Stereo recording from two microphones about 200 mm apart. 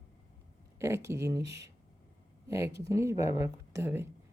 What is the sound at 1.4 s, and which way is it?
Speech, 60° right (ahead or behind).